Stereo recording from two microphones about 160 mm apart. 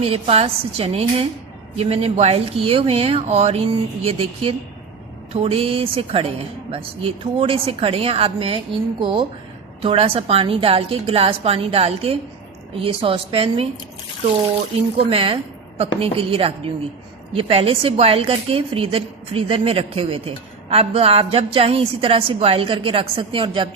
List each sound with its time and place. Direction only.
0.0 s a woman's voice: 40° right (ahead or behind)
14.9 s a woman's voice: 35° right (ahead or behind)